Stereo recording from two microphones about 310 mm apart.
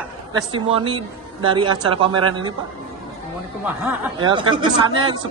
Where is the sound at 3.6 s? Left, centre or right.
Centre.